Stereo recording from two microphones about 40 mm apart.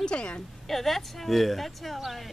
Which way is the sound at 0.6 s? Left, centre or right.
Centre.